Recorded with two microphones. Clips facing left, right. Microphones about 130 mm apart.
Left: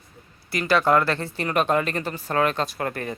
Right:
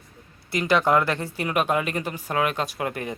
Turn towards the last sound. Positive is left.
turn(degrees=-15)  # may be behind; listen again after turning